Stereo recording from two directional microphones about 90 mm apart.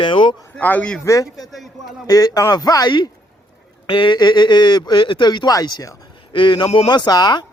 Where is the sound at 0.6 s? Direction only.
15° left (ahead or behind).